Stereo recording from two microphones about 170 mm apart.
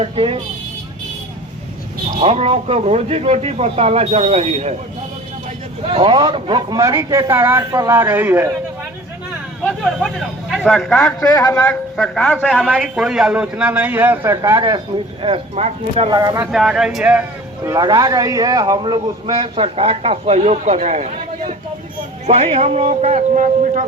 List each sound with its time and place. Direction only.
0.0 s speech: 30° right (ahead or behind)
2.1 s speech: 35° right (ahead or behind)
5.9 s a man's voice: 30° right (ahead or behind); by 8.4 s 10° right (ahead or behind)
10.5 s a man's voice: centre (ahead or behind); by 16.0 s 40° right (ahead or behind)
16.0 s speech: 20° right (ahead or behind)
16.5 s speech: centre (ahead or behind)
17.7 s speech: 20° right (ahead or behind); by 23.8 s 50° right (ahead or behind)